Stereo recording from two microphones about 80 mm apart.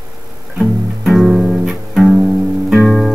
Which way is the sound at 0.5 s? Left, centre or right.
Centre.